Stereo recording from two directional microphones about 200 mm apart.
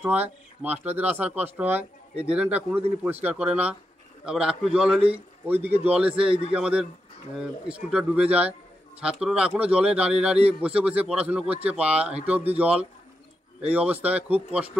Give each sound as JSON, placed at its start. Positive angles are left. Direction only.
{"t": 0.0, "sound": "a man's voice", "side_deg": -10}